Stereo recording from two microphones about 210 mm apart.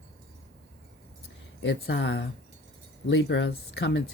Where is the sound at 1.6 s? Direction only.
60° left (ahead or behind).